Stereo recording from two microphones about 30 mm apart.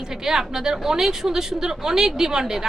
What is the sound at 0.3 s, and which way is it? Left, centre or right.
A woman's voice, centre.